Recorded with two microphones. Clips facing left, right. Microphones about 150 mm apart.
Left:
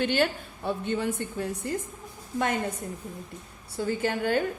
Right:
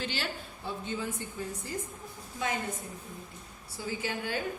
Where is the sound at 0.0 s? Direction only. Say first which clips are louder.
Left 11 dB; 60° left (ahead or behind).